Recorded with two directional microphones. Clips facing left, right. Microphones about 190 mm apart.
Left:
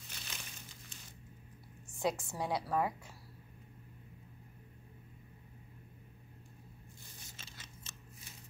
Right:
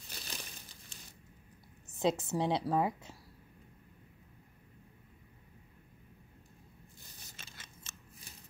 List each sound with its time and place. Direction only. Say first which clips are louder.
0.1 s crumpling: right 5 dB; 35° right (ahead or behind)
2.0 s a woman's voice: right 5 dB; 20° right (ahead or behind)
7.3 s scissors: even; 55° right (ahead or behind)